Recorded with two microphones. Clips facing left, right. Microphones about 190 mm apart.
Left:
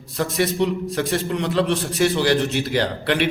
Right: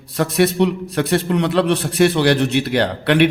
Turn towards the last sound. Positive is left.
turn(degrees=-65)  # may be behind; listen again after turning